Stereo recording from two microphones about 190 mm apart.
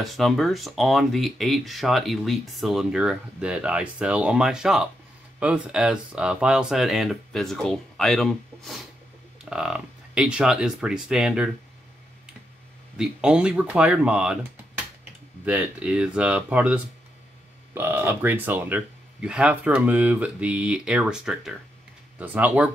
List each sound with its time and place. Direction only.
0.0 s speech: centre (ahead or behind)
12.9 s speech: 5° right (ahead or behind)
15.4 s speech: 5° right (ahead or behind)